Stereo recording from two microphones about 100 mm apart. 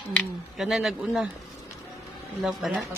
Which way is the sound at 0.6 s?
Centre (ahead or behind).